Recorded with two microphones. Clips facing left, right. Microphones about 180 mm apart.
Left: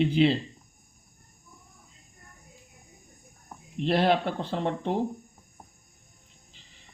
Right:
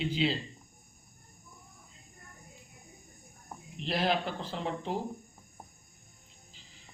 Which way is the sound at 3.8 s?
60° left (ahead or behind).